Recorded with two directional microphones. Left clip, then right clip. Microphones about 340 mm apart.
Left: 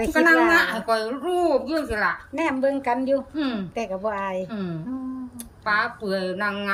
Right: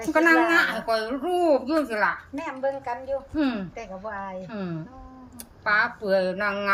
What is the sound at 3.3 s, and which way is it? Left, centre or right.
A woman's voice, centre.